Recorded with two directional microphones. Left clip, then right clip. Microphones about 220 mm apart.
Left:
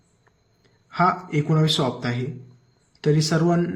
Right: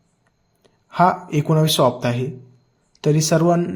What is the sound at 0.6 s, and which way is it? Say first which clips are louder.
A man's voice: right 4 dB; 20° right (ahead or behind).